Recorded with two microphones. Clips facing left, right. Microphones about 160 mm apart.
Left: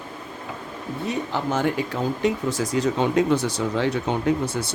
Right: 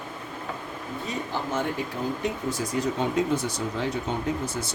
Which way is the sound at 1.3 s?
80° left.